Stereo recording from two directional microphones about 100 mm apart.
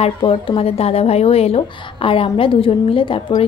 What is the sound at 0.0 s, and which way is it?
A woman's voice, 65° left (ahead or behind).